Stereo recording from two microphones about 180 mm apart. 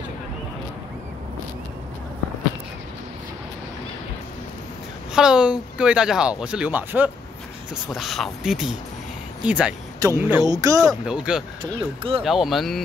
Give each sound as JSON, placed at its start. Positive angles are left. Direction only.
{"t": 5.1, "sound": "speech", "side_deg": -5}
{"t": 10.8, "sound": "speech", "side_deg": 0}
{"t": 11.6, "sound": "speech", "side_deg": -30}
{"t": 12.2, "sound": "speech", "side_deg": 0}